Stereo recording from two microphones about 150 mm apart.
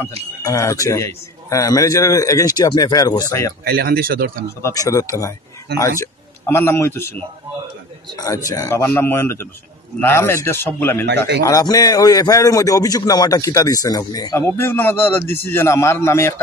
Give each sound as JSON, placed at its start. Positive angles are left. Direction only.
{"t": 0.4, "sound": "a man's voice", "side_deg": 20}
{"t": 3.6, "sound": "speech", "side_deg": -90}
{"t": 4.6, "sound": "a man's voice", "side_deg": 20}
{"t": 8.2, "sound": "a man's voice", "side_deg": 25}